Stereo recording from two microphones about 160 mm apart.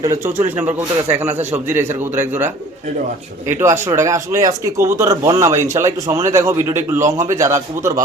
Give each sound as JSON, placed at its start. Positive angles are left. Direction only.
{"t": 0.0, "sound": "speech", "side_deg": -15}
{"t": 1.7, "sound": "speech", "side_deg": -15}
{"t": 3.4, "sound": "speech", "side_deg": -15}